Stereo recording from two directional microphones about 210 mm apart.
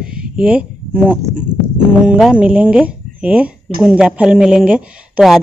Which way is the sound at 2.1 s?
5° right (ahead or behind).